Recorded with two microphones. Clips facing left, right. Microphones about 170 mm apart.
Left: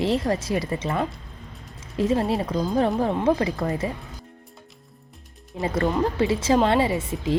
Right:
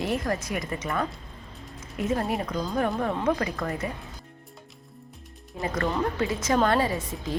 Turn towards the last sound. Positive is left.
turn(degrees=25)  # may be behind; listen again after turning